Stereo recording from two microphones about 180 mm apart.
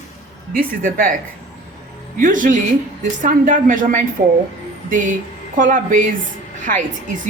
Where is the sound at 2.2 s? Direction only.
50° right (ahead or behind).